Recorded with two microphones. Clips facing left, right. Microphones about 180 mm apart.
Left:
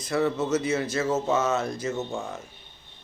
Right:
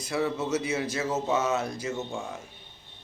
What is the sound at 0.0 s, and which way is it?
Speech, 10° right (ahead or behind).